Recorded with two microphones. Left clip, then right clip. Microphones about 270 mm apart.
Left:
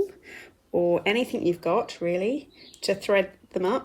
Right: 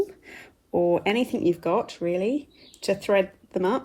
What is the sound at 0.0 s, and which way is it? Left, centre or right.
Speech, centre.